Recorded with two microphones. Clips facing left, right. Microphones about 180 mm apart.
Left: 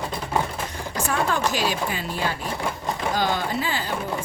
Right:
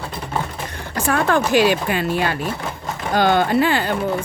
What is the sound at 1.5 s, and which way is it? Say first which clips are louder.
Speech: right 9 dB; 65° right (ahead or behind).